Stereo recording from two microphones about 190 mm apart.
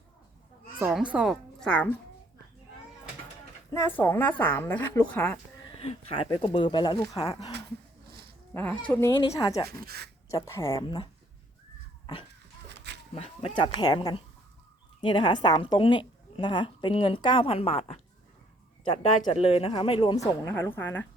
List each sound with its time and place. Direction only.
0.8 s a woman's voice: 5° right (ahead or behind)
3.7 s a woman's voice: 10° left (ahead or behind)
5.7 s a woman's voice: 30° left (ahead or behind)
8.5 s a woman's voice: 10° left (ahead or behind)
9.6 s speech: 55° right (ahead or behind)
10.3 s a woman's voice: 15° left (ahead or behind)
12.6 s a sound: 65° right (ahead or behind)
13.1 s a woman's voice: 30° left (ahead or behind)
19.3 s a woman's voice: 30° left (ahead or behind); by 21.1 s 10° left (ahead or behind)